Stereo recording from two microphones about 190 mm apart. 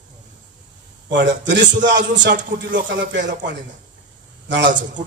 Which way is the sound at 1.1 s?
70° right (ahead or behind).